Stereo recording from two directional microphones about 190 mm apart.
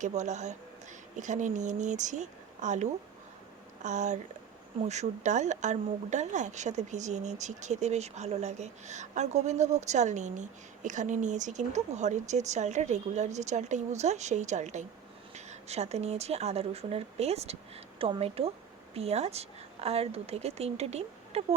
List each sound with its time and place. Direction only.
0.0 s speech: 40° right (ahead or behind)
3.8 s speech: 40° right (ahead or behind)